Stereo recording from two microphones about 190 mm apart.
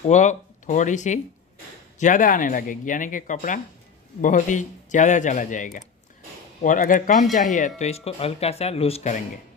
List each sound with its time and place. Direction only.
0.0 s speech: 40° left (ahead or behind)